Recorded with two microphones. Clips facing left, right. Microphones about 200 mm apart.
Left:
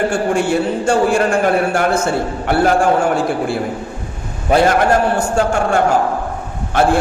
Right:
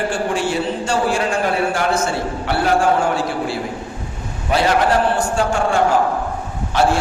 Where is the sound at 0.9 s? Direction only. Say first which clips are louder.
Left 6 dB; 55° left (ahead or behind).